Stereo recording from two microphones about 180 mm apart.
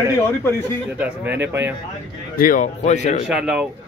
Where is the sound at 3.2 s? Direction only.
5° right (ahead or behind).